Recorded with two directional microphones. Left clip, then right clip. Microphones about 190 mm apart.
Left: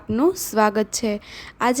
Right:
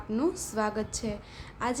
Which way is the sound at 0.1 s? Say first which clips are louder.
Left 10 dB; 45° left (ahead or behind).